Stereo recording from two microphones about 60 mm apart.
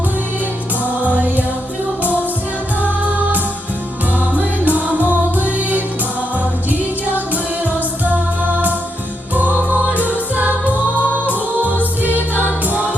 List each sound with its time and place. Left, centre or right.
0.9 s music: right
4.2 s music: right
7.6 s music: right
9.3 s music: right